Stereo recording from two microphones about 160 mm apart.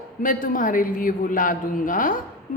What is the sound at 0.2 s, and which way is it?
A man's voice, 60° left (ahead or behind).